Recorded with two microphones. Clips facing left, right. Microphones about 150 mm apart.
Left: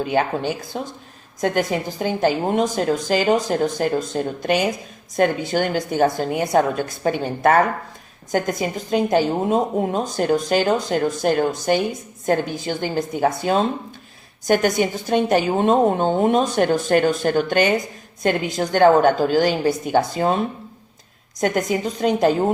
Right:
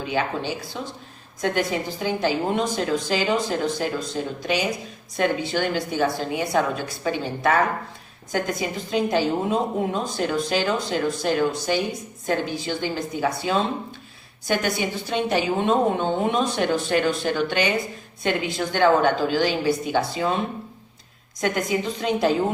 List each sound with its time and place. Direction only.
0.0 s a woman's voice: 50° left (ahead or behind)
21.4 s a woman's voice: 45° left (ahead or behind)